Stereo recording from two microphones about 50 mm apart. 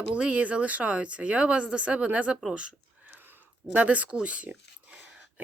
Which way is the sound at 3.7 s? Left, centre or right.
Right.